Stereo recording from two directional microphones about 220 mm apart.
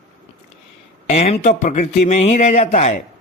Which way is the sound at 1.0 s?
30° left (ahead or behind).